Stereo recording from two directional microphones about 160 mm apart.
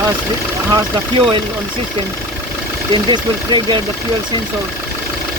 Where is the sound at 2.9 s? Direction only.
30° right (ahead or behind).